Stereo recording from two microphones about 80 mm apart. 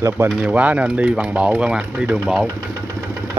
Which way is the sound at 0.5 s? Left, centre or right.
Centre.